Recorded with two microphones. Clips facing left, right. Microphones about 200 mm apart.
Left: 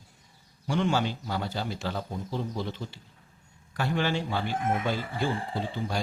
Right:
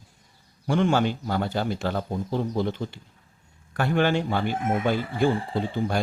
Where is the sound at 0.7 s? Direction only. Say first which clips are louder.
Right 5 dB; 55° right (ahead or behind).